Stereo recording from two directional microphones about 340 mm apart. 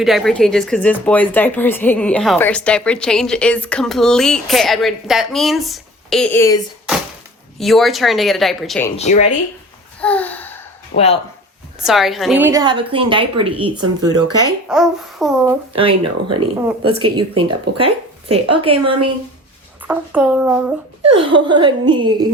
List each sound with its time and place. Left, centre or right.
0.0 s speech: centre
7.6 s speech: centre
9.0 s speech: centre
10.0 s babbling: centre
10.9 s speech: centre
11.8 s a woman's voice: centre
14.7 s speech: centre
15.7 s speech: centre
16.3 s speech: right
16.8 s a woman's voice: centre
19.8 s speech: centre
21.2 s a woman's voice: centre